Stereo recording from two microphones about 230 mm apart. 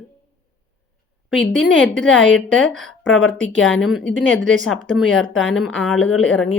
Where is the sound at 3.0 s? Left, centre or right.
Left.